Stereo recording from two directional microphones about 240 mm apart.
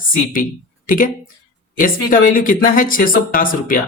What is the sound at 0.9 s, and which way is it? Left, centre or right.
Speech, left.